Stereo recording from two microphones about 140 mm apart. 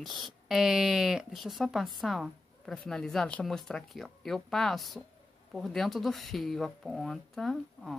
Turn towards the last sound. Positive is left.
turn(degrees=0)  # may be behind; listen again after turning